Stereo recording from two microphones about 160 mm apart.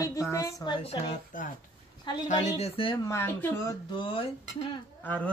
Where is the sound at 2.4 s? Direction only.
40° left (ahead or behind).